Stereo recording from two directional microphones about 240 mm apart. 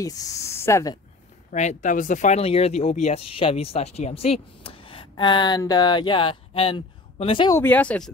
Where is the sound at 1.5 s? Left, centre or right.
Left.